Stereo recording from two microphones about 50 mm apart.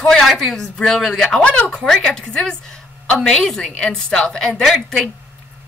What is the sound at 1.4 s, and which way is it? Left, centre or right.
Speech, left.